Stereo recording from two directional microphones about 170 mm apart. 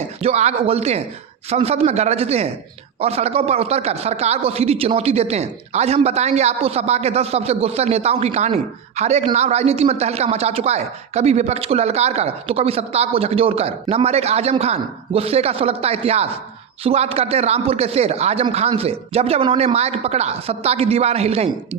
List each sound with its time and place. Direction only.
0.2 s speech: 40° right (ahead or behind)